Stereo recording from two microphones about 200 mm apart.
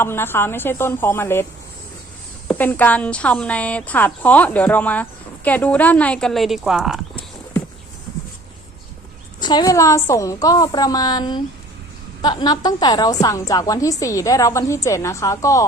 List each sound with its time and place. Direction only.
0.0 s a woman's voice: 10° left (ahead or behind)
2.5 s a woman's voice: 10° left (ahead or behind)
9.4 s a woman's voice: 20° left (ahead or behind)